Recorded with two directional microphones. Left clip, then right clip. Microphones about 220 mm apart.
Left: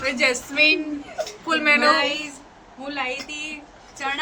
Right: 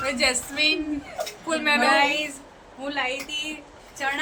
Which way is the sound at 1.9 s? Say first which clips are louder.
Right 1 dB; 30° right (ahead or behind).